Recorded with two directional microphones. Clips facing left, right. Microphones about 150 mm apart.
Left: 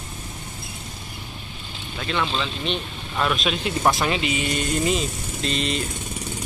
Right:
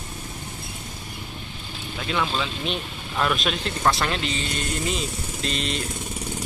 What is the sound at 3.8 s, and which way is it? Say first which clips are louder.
Speech: left 2 dB; 15° left (ahead or behind).